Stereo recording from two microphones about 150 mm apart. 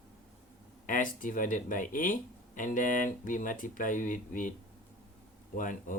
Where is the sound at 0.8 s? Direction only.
65° left (ahead or behind).